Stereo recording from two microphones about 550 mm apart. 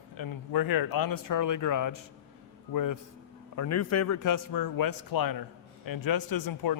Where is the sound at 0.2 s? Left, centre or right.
Left.